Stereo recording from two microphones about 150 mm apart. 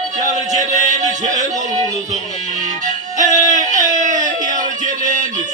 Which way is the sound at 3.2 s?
55° right (ahead or behind).